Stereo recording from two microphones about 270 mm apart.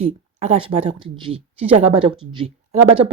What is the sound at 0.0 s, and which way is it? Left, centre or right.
Speech, right.